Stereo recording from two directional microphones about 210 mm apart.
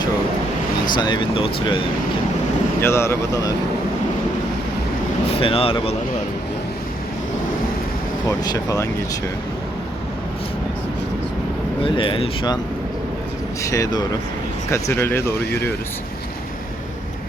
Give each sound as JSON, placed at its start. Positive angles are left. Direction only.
{"t": 0.9, "sound": "speech", "side_deg": 20}
{"t": 2.8, "sound": "speech", "side_deg": 15}
{"t": 5.3, "sound": "speech", "side_deg": 25}
{"t": 8.3, "sound": "speech", "side_deg": 15}
{"t": 11.8, "sound": "speech", "side_deg": 25}
{"t": 13.6, "sound": "speech", "side_deg": 15}